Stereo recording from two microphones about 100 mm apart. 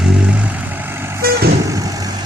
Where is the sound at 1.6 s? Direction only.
35° right (ahead or behind).